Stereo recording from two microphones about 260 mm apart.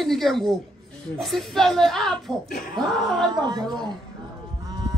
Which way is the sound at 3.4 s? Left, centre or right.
Centre.